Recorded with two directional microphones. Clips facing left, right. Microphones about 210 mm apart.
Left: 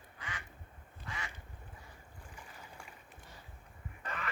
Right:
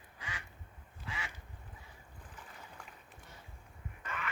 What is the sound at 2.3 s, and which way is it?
Boat, 10° left (ahead or behind).